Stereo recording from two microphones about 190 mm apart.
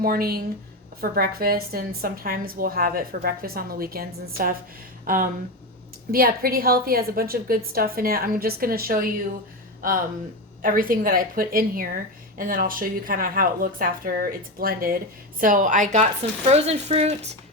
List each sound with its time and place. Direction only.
0.0 s a woman's voice: 50° right (ahead or behind)
10.6 s a woman's voice: 45° right (ahead or behind)